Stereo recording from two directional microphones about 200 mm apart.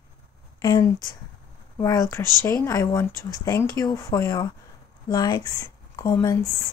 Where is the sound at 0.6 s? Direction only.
20° left (ahead or behind).